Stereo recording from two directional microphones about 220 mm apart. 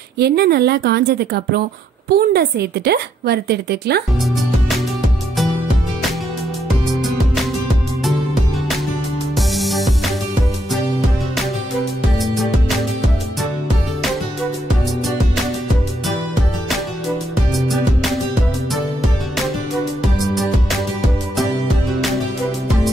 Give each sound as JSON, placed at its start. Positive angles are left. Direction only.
{"t": 0.2, "sound": "a woman's voice", "side_deg": -45}
{"t": 9.5, "sound": "music", "side_deg": 0}
{"t": 12.2, "sound": "music", "side_deg": 0}
{"t": 17.6, "sound": "music", "side_deg": 0}
{"t": 19.3, "sound": "music", "side_deg": 0}